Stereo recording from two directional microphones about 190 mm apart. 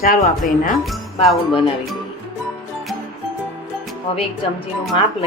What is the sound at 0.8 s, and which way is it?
Speech, centre (ahead or behind).